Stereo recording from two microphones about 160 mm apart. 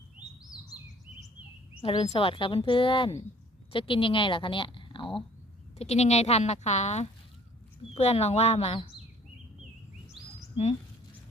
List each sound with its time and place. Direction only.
1.8 s a woman's voice: 35° left (ahead or behind)